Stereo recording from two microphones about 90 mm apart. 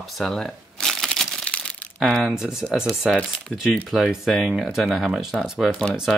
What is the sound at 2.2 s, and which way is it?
Speech, 5° right (ahead or behind).